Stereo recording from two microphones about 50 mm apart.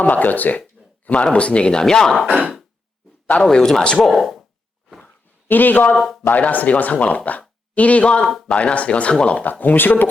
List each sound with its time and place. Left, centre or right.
0.0 s speech: left; by 2.1 s centre
2.2 s speech: right
3.4 s speech: centre
4.0 s speech: centre
5.5 s speech: left